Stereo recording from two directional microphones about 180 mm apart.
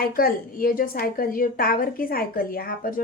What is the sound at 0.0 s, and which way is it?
A woman's voice, 55° left (ahead or behind).